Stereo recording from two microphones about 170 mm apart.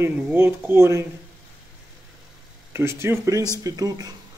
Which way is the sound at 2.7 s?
15° right (ahead or behind).